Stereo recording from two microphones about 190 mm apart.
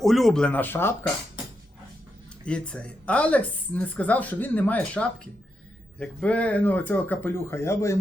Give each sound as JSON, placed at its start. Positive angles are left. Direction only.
{"t": 0.0, "sound": "speech", "side_deg": 0}
{"t": 2.4, "sound": "speech", "side_deg": 5}